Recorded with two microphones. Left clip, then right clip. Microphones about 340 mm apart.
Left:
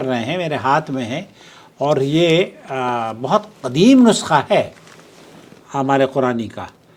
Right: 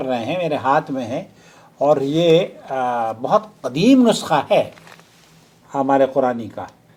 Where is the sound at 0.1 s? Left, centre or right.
Left.